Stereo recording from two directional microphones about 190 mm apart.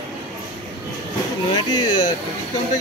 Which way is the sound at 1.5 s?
20° left (ahead or behind).